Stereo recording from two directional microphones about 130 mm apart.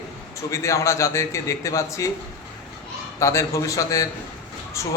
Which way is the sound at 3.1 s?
25° left (ahead or behind).